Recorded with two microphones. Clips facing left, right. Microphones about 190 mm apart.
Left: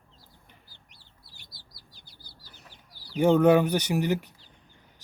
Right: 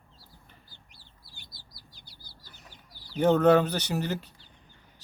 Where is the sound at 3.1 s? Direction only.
10° left (ahead or behind).